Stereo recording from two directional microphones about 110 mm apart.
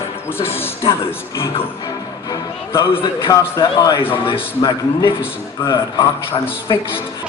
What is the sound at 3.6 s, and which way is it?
Speech, 35° left (ahead or behind).